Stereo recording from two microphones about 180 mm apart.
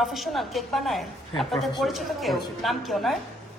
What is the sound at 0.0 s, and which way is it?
A woman's voice, centre (ahead or behind).